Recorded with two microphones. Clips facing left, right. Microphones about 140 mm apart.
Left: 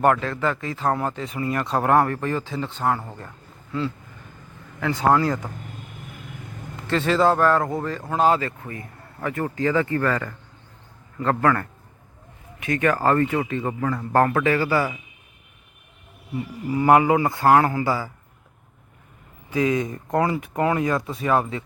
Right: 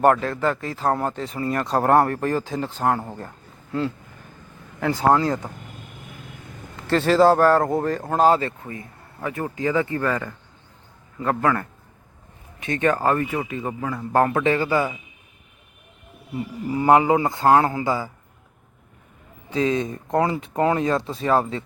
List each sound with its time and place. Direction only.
0.1 s speech: 40° right (ahead or behind)
3.2 s a sound: 45° right (ahead or behind)
4.8 s speech: 35° right (ahead or behind)
5.1 s speech: 25° right (ahead or behind)
6.8 s speech: 40° right (ahead or behind)
8.6 s speech: 20° right (ahead or behind)
16.6 s speech: 25° right (ahead or behind)
19.5 s speech: 25° right (ahead or behind)